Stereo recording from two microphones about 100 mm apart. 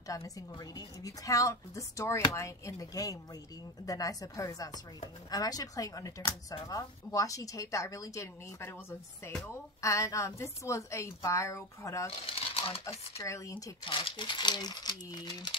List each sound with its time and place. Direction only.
0.1 s a woman's voice: 35° left (ahead or behind)
9.8 s a woman's voice: 30° left (ahead or behind)
12.3 s crumpling: 75° left (ahead or behind)
13.2 s a woman's voice: 30° left (ahead or behind)
13.8 s speech: 55° left (ahead or behind)